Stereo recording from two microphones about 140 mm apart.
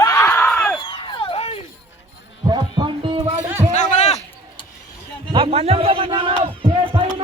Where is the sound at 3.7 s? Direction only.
60° left (ahead or behind).